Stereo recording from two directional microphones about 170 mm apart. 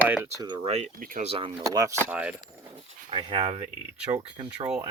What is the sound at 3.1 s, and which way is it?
Speech, 30° right (ahead or behind).